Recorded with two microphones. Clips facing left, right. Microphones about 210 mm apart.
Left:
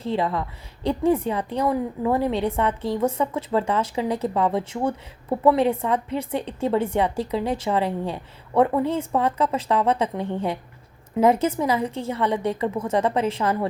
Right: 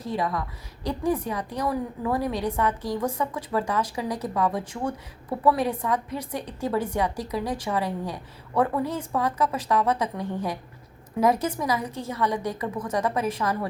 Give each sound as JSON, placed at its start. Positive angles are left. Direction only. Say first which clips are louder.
{"t": 0.0, "sound": "a woman's voice", "louder": "left 4 dB", "side_deg": 25}